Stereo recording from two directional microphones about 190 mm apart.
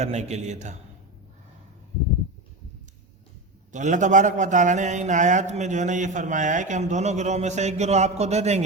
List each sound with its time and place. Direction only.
0.0 s a man's voice: 35° right (ahead or behind)
3.7 s a man's voice: 40° right (ahead or behind)